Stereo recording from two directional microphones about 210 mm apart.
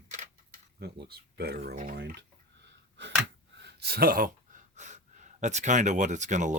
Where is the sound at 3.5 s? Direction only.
50° right (ahead or behind); by 6.5 s 35° right (ahead or behind).